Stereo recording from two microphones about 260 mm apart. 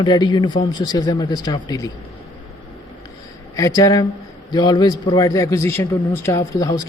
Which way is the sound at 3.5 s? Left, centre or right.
Centre.